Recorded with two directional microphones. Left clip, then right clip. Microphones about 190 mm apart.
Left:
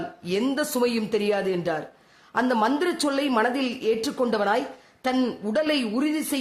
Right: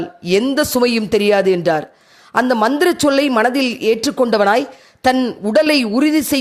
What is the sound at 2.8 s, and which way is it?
A woman's voice, 40° right (ahead or behind).